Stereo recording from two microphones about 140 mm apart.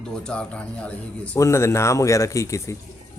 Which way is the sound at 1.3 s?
20° left (ahead or behind).